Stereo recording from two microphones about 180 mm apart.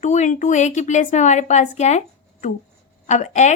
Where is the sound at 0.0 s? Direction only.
40° left (ahead or behind).